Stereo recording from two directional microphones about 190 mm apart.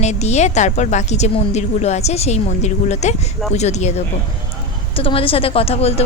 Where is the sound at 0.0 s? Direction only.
35° left (ahead or behind).